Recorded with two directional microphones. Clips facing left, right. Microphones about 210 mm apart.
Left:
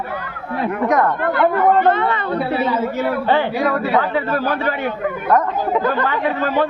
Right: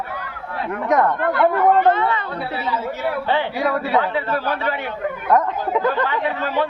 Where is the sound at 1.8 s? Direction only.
60° left (ahead or behind).